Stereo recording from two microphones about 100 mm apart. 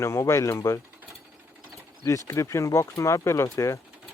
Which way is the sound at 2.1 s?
35° left (ahead or behind).